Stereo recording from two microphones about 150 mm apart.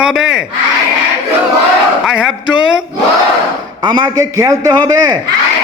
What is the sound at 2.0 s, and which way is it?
Speech, 5° right (ahead or behind).